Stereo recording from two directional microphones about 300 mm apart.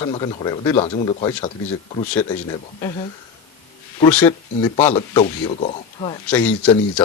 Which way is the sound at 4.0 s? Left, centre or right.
Centre.